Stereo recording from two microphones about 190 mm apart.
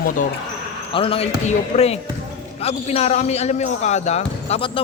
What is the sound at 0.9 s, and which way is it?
Speech, 30° left (ahead or behind).